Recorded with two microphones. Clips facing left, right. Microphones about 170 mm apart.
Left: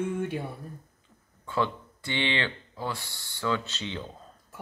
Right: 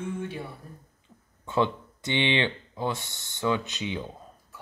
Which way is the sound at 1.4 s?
20° right (ahead or behind).